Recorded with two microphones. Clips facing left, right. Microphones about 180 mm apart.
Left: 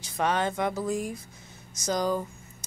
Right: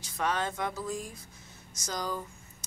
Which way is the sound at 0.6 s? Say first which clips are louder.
Left 6 dB; 60° left (ahead or behind).